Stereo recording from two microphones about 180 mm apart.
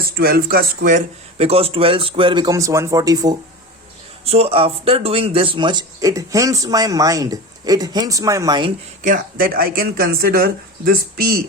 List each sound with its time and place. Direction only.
0.0 s speech: 55° right (ahead or behind)
1.4 s speech: 35° right (ahead or behind)
4.3 s speech: 35° right (ahead or behind)
9.0 s speech: 50° right (ahead or behind)